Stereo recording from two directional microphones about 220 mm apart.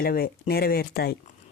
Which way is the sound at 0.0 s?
45° left (ahead or behind).